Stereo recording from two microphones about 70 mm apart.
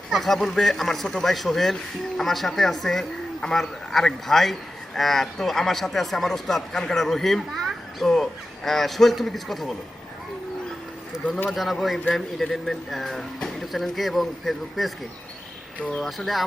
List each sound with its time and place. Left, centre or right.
0.1 s speech: centre
11.5 s speech: centre
15.8 s speech: centre
16.0 s speech: centre